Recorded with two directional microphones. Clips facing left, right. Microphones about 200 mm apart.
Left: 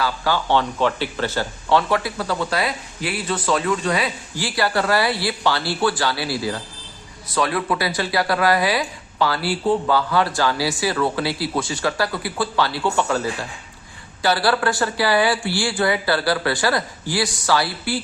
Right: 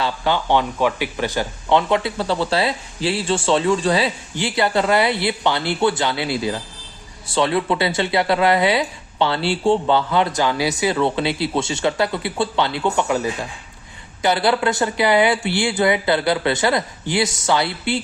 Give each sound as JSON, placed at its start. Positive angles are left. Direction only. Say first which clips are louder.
{"t": 0.0, "sound": "speech", "louder": "right 1 dB", "side_deg": -20}